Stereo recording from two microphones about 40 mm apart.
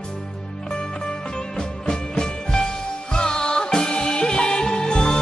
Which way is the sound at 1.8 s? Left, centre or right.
Centre.